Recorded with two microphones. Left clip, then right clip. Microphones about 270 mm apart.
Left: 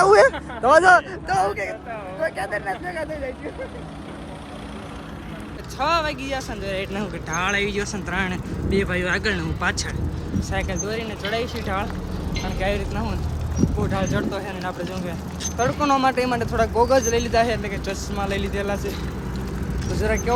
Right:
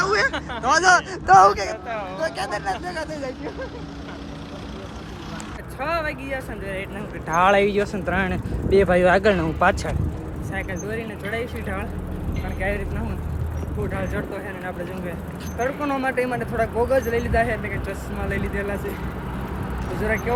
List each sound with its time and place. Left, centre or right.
0.0 s a sound: centre
0.6 s speech: centre
2.2 s speech: centre
5.8 s speech: centre
7.3 s speech: centre
10.5 s speech: centre
13.9 s speech: centre
20.1 s speech: centre